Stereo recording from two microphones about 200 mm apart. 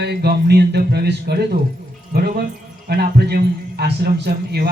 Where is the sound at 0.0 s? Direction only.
55° right (ahead or behind).